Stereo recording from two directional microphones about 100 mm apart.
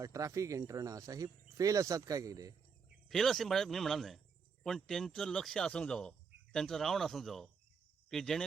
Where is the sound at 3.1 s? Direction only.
5° left (ahead or behind).